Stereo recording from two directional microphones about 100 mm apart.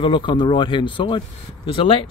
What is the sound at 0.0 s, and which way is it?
Speech, 55° left (ahead or behind).